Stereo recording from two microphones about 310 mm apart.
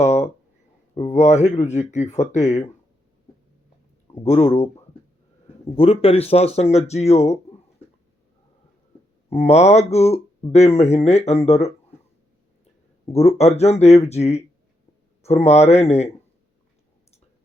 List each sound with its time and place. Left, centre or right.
0.0 s a sound: left
0.9 s speech: left
4.1 s speech: centre
9.3 s speech: centre
13.1 s speech: centre